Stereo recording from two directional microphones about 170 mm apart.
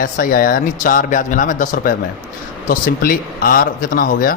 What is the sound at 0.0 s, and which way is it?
Speech, 55° left (ahead or behind).